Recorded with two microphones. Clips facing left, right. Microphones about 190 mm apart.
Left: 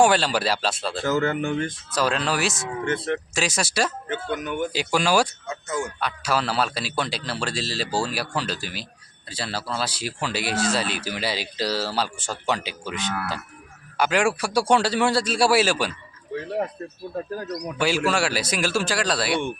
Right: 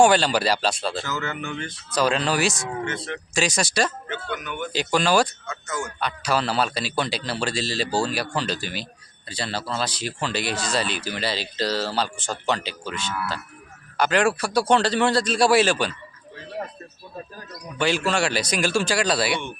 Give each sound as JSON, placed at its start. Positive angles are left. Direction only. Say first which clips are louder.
{"t": 0.0, "sound": "a man's voice", "louder": "right 2 dB", "side_deg": 0}
{"t": 1.0, "sound": "speech", "louder": "left 7 dB", "side_deg": 50}
{"t": 2.0, "sound": "a man's voice", "louder": "right 2 dB", "side_deg": 0}
{"t": 2.9, "sound": "speech", "louder": "left 6 dB", "side_deg": 55}
{"t": 3.3, "sound": "a man's voice", "louder": "right 6 dB", "side_deg": 5}
{"t": 4.1, "sound": "speech", "louder": "left 4 dB", "side_deg": 45}
{"t": 4.7, "sound": "a man's voice", "louder": "right 2 dB", "side_deg": 10}
{"t": 17.7, "sound": "a man's voice", "louder": "even", "side_deg": 5}